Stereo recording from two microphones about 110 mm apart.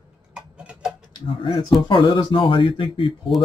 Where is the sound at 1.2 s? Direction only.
50° left (ahead or behind).